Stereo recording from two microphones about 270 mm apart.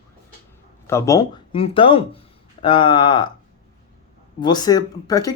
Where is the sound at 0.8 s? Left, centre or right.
Centre.